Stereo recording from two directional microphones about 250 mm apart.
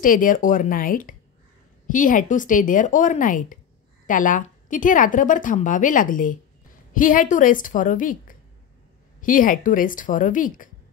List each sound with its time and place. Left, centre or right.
0.0 s a woman's voice: left